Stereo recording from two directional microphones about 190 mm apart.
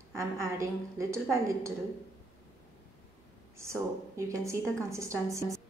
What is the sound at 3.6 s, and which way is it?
A woman's voice, 15° right (ahead or behind).